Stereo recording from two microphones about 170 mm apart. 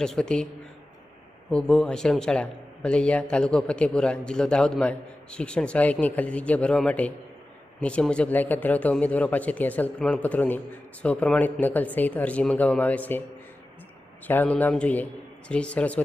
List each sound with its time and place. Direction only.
0.0 s a man's voice: 5° left (ahead or behind)
1.5 s a man's voice: 5° left (ahead or behind)
14.3 s a man's voice: 10° left (ahead or behind)